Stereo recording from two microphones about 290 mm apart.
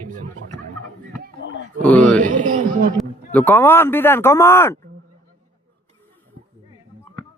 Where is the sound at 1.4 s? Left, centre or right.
Left.